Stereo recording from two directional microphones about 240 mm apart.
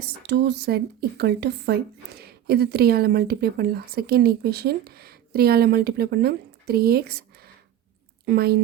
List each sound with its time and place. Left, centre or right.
0.2 s speech: right